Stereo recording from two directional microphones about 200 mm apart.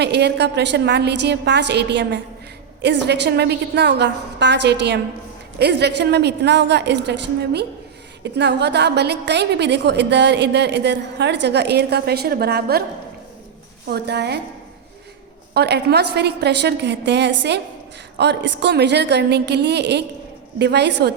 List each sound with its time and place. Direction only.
0.0 s a woman's voice: 55° right (ahead or behind)
13.8 s a woman's voice: 55° right (ahead or behind)
15.5 s a woman's voice: 55° right (ahead or behind)